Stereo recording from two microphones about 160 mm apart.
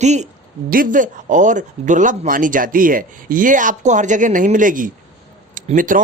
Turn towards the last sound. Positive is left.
turn(degrees=-55)  # may be behind; listen again after turning